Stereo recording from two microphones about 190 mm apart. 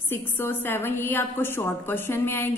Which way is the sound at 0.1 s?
10° left (ahead or behind).